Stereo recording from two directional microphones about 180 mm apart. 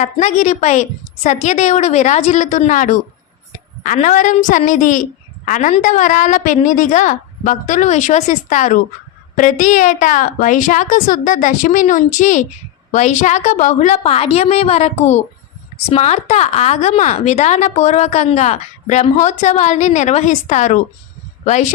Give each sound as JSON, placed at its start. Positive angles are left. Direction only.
{"t": 0.0, "sound": "a woman's voice", "side_deg": 40}